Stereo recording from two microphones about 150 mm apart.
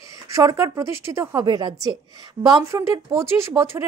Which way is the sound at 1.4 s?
30° right (ahead or behind).